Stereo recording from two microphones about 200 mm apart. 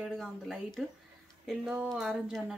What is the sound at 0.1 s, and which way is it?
Speech, centre (ahead or behind).